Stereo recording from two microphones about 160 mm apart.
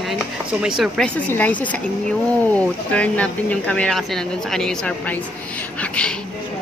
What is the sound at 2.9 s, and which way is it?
Speech, 10° left (ahead or behind).